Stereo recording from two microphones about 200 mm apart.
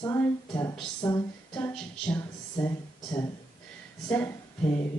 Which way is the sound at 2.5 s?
15° left (ahead or behind).